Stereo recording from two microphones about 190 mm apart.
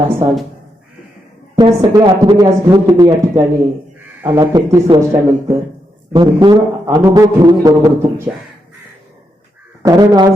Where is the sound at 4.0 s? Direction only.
10° right (ahead or behind).